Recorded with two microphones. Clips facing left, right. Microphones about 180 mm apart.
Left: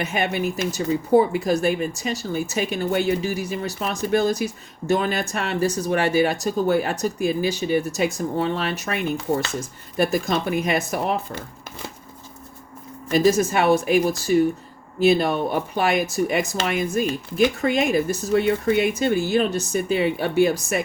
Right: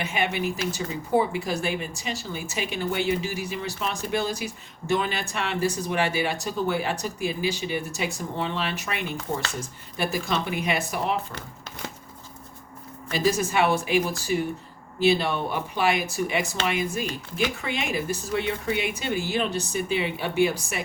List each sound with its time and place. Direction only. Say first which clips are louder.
0.0 s speech: left 3 dB; 40° left (ahead or behind)
10.0 s speech: left 6 dB; 45° left (ahead or behind)
13.1 s speech: left 5 dB; 45° left (ahead or behind)